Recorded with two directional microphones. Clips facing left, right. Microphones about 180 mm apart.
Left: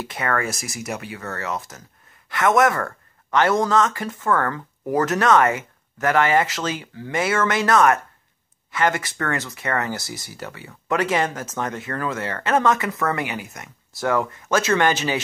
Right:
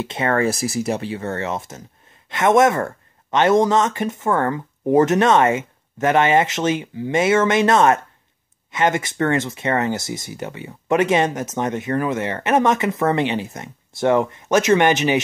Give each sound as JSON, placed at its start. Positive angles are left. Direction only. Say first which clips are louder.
{"t": 0.0, "sound": "speech", "louder": "right 5 dB", "side_deg": -25}